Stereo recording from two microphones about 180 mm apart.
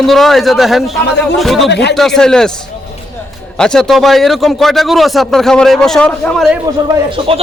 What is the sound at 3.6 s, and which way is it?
A man's voice, 5° left (ahead or behind).